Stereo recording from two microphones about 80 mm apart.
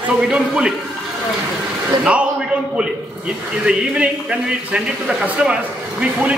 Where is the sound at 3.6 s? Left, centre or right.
Centre.